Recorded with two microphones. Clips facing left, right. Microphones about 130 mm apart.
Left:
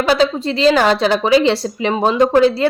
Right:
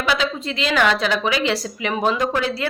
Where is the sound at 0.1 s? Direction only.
35° left (ahead or behind).